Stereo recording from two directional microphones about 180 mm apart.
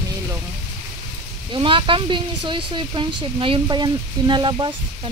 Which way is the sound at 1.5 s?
30° right (ahead or behind).